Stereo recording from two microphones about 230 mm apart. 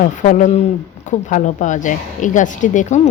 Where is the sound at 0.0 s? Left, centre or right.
Left.